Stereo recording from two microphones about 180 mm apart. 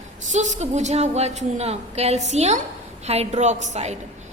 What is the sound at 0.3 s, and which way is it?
A woman's voice, 40° right (ahead or behind).